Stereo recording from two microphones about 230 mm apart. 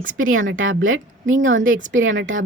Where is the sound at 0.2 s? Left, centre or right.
Right.